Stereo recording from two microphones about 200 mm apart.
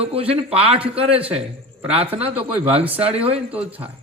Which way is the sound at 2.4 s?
30° right (ahead or behind).